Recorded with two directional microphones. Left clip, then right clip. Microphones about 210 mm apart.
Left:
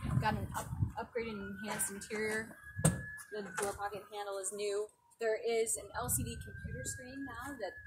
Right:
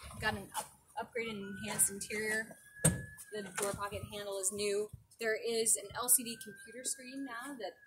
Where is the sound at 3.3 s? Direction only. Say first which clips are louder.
Right 1 dB; 30° right (ahead or behind).